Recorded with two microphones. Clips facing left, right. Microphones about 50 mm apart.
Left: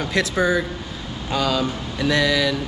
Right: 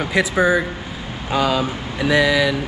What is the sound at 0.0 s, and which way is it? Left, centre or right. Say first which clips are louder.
Speech: right 3 dB; centre.